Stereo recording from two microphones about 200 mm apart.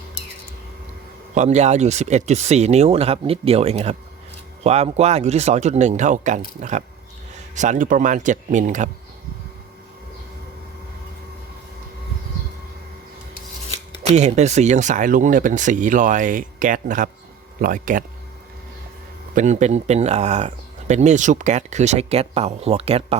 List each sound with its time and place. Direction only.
1.3 s speech: 35° right (ahead or behind)
14.2 s speech: 35° right (ahead or behind)
19.3 s speech: 35° right (ahead or behind)